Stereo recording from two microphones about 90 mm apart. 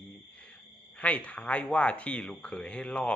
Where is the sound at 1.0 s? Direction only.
15° left (ahead or behind).